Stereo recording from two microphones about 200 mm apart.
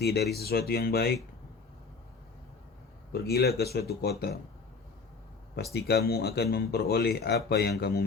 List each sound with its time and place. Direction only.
0.0 s speech: 55° left (ahead or behind)
3.1 s speech: 50° left (ahead or behind)
5.7 s speech: 55° left (ahead or behind)